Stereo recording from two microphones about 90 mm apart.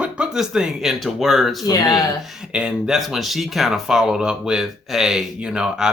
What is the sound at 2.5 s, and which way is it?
Speech, 10° right (ahead or behind).